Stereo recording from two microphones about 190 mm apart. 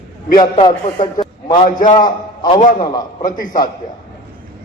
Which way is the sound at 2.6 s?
40° left (ahead or behind).